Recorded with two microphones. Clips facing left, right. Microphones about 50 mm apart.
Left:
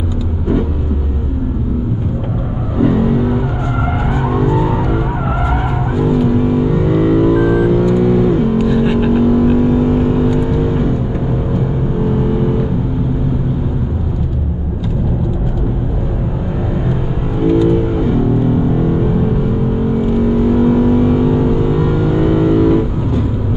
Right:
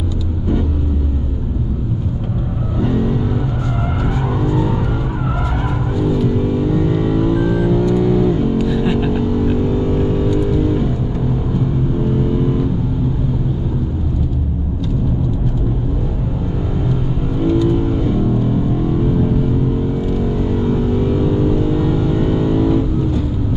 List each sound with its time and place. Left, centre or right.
2.8 s vehicle: centre
4.4 s vehicle: left
5.9 s vehicle: left
12.2 s vehicle: centre
17.4 s vehicle: centre